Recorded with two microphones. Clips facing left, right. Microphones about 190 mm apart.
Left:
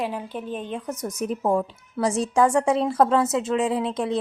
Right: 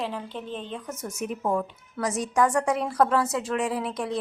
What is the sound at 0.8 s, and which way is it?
A woman's voice, 35° left (ahead or behind).